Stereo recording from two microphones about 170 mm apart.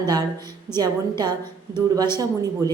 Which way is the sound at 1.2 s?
25° right (ahead or behind).